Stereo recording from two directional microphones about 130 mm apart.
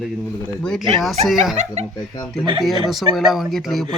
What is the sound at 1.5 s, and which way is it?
Speech, 60° right (ahead or behind).